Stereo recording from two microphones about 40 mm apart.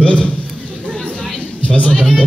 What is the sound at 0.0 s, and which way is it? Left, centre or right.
Speech, left.